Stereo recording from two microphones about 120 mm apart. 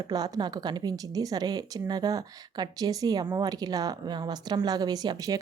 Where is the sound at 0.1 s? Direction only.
30° right (ahead or behind).